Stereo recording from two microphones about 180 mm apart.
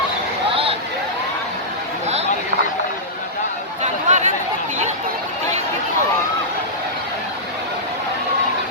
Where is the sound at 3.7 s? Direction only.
40° right (ahead or behind).